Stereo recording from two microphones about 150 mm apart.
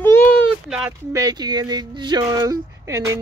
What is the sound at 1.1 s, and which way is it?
Speech, 25° right (ahead or behind).